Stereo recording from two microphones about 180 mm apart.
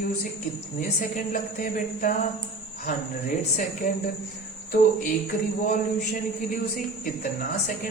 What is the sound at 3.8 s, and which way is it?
Speech, 60° left (ahead or behind).